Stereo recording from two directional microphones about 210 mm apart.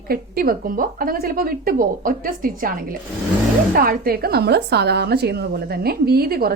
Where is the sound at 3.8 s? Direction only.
45° right (ahead or behind).